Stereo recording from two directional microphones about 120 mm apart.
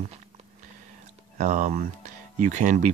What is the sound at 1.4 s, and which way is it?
Speech, 90° right.